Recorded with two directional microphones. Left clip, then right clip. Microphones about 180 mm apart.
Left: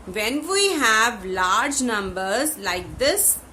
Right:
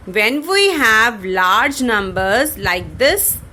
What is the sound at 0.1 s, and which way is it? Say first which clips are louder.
A woman's voice: right 8 dB; 40° right (ahead or behind).